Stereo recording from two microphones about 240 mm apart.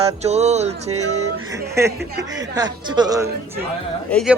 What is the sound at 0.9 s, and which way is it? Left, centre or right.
Music, right.